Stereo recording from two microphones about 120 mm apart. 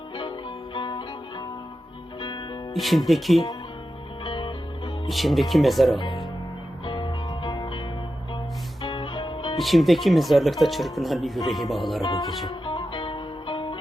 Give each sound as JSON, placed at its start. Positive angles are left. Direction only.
{"t": 0.2, "sound": "music", "side_deg": 45}
{"t": 2.7, "sound": "speech", "side_deg": 0}
{"t": 4.2, "sound": "music", "side_deg": 40}
{"t": 5.0, "sound": "speech", "side_deg": 0}
{"t": 6.8, "sound": "music", "side_deg": 40}
{"t": 8.8, "sound": "music", "side_deg": 45}
{"t": 9.6, "sound": "speech", "side_deg": 0}
{"t": 12.5, "sound": "music", "side_deg": 45}